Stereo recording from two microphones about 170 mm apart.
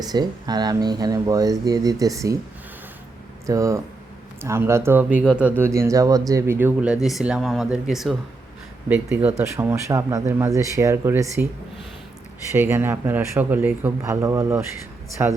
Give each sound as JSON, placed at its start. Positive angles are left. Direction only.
{"t": 0.0, "sound": "speech", "side_deg": -25}
{"t": 3.4, "sound": "speech", "side_deg": -20}
{"t": 8.9, "sound": "speech", "side_deg": -15}
{"t": 12.5, "sound": "speech", "side_deg": -15}